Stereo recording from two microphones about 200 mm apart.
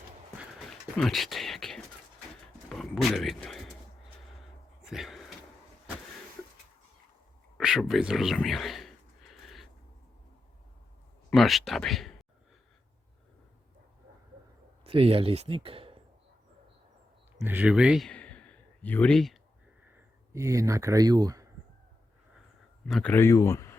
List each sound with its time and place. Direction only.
0.9 s speech: centre (ahead or behind)
4.8 s a sound: centre (ahead or behind)
7.6 s a sound: centre (ahead or behind)
11.3 s speech: centre (ahead or behind)
14.8 s speech: 30° right (ahead or behind)
17.4 s speech: 10° right (ahead or behind)
20.3 s speech: 15° right (ahead or behind)
22.9 s speech: 5° left (ahead or behind)